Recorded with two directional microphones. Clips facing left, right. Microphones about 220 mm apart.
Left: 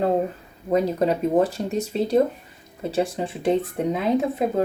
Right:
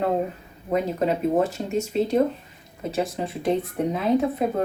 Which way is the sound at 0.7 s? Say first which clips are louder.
Left 3 dB; 35° left (ahead or behind).